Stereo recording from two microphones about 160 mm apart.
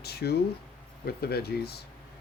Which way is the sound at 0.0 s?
85° left.